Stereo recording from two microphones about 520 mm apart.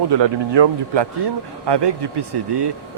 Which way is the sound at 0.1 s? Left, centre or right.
Right.